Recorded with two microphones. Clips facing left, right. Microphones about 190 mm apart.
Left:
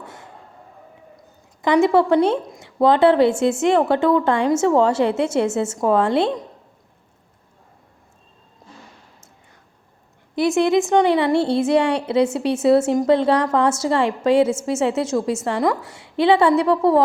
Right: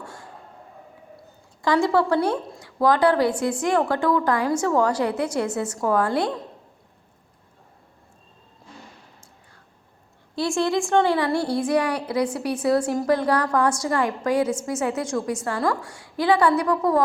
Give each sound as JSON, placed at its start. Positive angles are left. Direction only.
{"t": 0.0, "sound": "a sound", "side_deg": 20}
{"t": 1.6, "sound": "a woman's voice", "side_deg": 20}
{"t": 10.3, "sound": "a woman's voice", "side_deg": 20}